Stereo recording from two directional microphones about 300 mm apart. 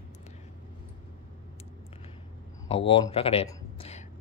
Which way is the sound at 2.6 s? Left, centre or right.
Centre.